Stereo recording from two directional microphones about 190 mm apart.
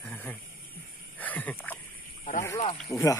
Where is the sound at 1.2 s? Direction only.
10° left (ahead or behind).